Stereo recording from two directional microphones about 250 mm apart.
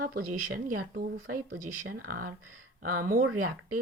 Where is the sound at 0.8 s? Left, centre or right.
Right.